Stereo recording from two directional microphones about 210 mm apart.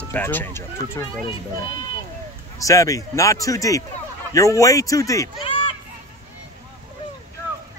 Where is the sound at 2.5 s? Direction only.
15° left (ahead or behind).